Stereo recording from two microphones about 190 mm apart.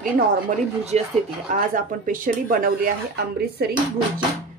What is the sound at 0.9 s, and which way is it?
A woman's voice, 35° right (ahead or behind).